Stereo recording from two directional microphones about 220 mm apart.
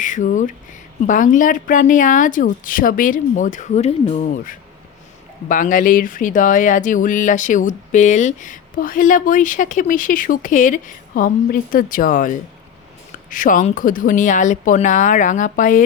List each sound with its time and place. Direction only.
0.0 s speech: 35° left (ahead or behind)